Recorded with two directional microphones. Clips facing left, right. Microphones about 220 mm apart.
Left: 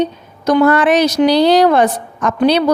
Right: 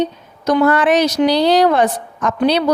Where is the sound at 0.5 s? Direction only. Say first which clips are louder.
Left 2 dB; 60° left (ahead or behind).